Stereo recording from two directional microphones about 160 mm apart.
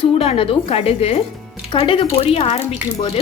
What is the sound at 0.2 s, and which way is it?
Speech, 40° left (ahead or behind).